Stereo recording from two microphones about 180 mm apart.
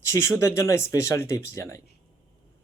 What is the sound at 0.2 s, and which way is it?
Speech, 15° left (ahead or behind).